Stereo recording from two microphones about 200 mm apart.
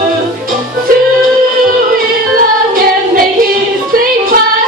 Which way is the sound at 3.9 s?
45° right (ahead or behind).